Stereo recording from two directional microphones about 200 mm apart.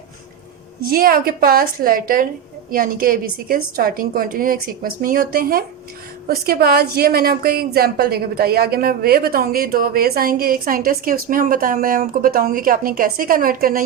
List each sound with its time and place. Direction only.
0.8 s speech: 45° right (ahead or behind)